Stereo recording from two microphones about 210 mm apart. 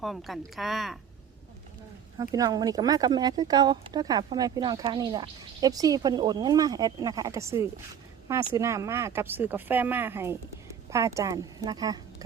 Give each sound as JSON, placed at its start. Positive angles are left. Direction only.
{"t": 0.0, "sound": "a woman's voice", "side_deg": 0}
{"t": 2.1, "sound": "speech", "side_deg": -15}